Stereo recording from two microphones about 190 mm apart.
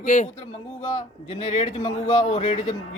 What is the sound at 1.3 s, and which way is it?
A man's voice, 35° left (ahead or behind).